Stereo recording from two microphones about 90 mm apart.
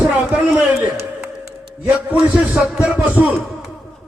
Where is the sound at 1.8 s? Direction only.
20° right (ahead or behind).